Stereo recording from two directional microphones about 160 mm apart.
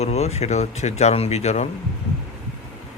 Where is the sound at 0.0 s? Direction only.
40° left (ahead or behind).